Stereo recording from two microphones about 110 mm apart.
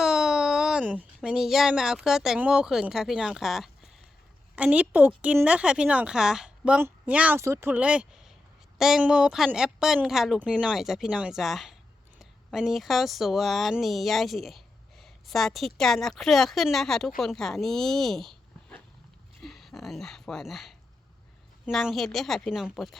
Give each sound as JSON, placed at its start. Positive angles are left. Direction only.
{"t": 0.0, "sound": "speech", "side_deg": -5}
{"t": 4.5, "sound": "a woman's voice", "side_deg": -10}
{"t": 7.3, "sound": "speech", "side_deg": -25}
{"t": 7.7, "sound": "a woman's voice", "side_deg": -10}